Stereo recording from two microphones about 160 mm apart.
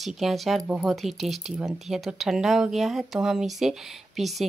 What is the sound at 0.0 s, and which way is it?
Speech, centre (ahead or behind).